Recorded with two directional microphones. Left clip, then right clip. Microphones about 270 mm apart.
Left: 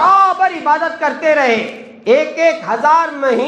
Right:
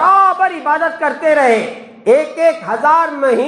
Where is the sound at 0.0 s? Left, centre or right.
Right.